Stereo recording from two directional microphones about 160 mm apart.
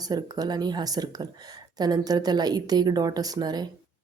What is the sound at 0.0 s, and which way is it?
A woman's voice, 25° right (ahead or behind).